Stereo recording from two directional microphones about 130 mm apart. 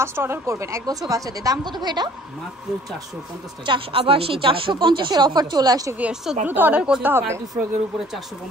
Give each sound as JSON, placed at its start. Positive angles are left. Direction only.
{"t": 0.0, "sound": "a woman's voice", "side_deg": -20}
{"t": 3.6, "sound": "speech", "side_deg": -40}
{"t": 5.9, "sound": "a woman's voice", "side_deg": -10}